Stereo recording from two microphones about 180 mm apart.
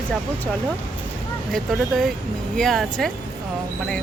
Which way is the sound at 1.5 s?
Centre (ahead or behind).